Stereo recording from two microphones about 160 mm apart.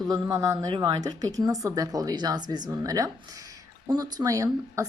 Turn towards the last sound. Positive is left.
turn(degrees=-20)  # may be behind; listen again after turning